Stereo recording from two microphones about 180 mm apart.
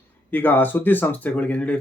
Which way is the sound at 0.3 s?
10° left (ahead or behind).